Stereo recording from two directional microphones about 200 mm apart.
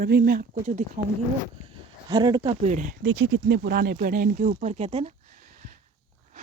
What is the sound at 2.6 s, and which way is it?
Speech, 40° right (ahead or behind).